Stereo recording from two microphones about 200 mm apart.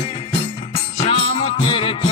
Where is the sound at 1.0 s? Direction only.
30° left (ahead or behind).